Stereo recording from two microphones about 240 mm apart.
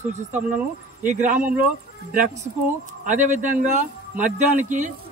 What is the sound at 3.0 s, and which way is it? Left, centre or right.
Speech, right.